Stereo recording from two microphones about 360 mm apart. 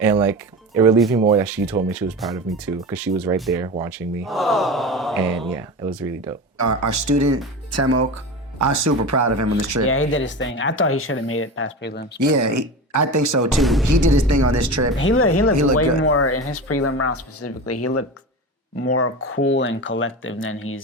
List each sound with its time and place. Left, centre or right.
0.0 s speech: centre
6.6 s speech: right
9.8 s speech: left
12.2 s speech: right
13.6 s speech: centre
13.8 s speech: right
14.9 s speech: left
19.4 s speech: left